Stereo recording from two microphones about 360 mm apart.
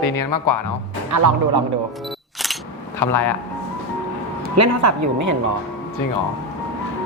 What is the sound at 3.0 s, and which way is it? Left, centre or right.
Speech, left.